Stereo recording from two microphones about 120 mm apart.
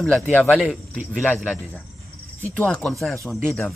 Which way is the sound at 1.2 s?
10° left (ahead or behind).